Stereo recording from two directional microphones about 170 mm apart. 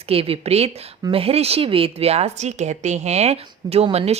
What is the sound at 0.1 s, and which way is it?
A woman's voice, 35° right (ahead or behind).